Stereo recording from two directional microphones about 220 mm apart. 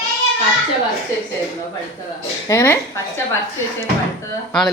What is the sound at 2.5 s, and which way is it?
Speech, 15° left (ahead or behind).